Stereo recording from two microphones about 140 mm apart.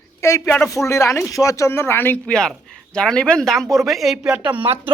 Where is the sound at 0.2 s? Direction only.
20° left (ahead or behind).